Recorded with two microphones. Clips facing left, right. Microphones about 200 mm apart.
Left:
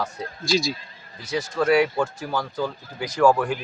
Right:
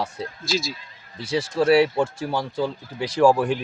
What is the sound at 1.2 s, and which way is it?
Speech, 30° right (ahead or behind).